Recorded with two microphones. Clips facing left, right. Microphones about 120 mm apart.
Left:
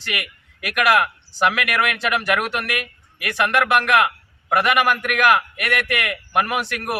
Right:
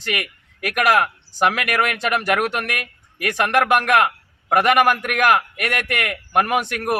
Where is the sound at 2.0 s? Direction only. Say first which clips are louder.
Right 1 dB; 45° right (ahead or behind).